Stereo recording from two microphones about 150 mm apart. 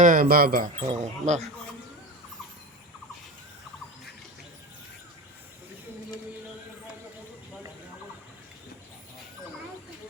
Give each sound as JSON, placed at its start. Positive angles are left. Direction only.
{"t": 0.0, "sound": "speech", "side_deg": -65}
{"t": 0.9, "sound": "speech", "side_deg": -50}